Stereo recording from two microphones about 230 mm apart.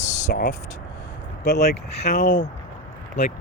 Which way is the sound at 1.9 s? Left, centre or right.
Left.